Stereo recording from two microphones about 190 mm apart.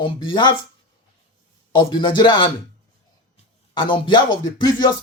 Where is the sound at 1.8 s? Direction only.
25° left (ahead or behind).